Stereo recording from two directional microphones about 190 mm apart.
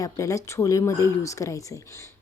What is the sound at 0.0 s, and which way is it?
A woman's voice, 15° left (ahead or behind).